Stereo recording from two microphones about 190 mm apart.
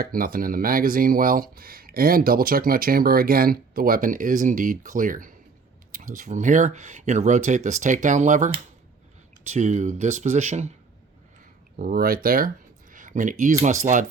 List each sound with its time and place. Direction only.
0.0 s speech: 50° right (ahead or behind)
11.8 s speech: 50° right (ahead or behind)